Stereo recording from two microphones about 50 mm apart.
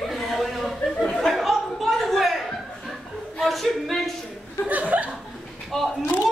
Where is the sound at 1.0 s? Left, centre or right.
Centre.